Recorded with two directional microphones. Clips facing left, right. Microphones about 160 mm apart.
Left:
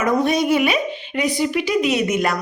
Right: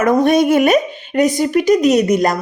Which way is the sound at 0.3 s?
50° right (ahead or behind).